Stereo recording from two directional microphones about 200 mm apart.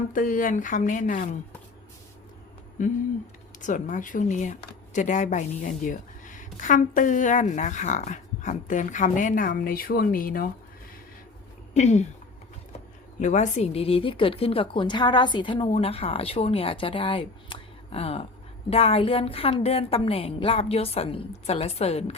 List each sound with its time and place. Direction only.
0.1 s a woman's voice: 45° left (ahead or behind)
2.8 s a woman's voice: 40° left (ahead or behind)
11.7 s speech: 35° left (ahead or behind)
13.1 s speech: 35° left (ahead or behind)